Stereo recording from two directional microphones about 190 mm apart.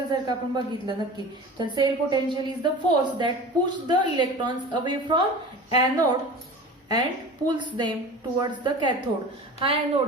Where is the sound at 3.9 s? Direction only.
25° right (ahead or behind).